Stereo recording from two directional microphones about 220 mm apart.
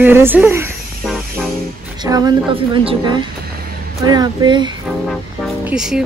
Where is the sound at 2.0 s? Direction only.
20° right (ahead or behind).